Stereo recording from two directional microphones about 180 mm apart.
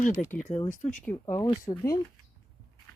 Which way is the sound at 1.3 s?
25° left (ahead or behind).